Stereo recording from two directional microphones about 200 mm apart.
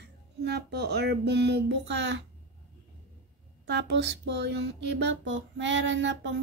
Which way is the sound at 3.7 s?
60° right (ahead or behind).